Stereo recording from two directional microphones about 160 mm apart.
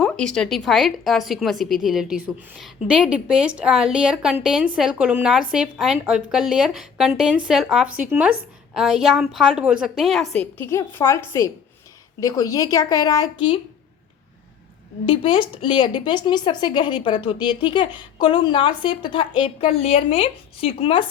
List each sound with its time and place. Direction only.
0.0 s a woman's voice: 5° left (ahead or behind)
10.6 s a woman's voice: 15° left (ahead or behind)
15.0 s speech: 35° left (ahead or behind)